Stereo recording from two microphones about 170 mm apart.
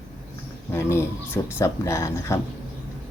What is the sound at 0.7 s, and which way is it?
Speech, 15° left (ahead or behind).